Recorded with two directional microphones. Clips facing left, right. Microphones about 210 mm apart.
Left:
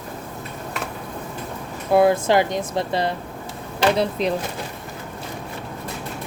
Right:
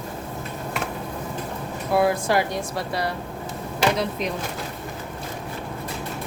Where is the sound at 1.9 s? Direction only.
25° left (ahead or behind).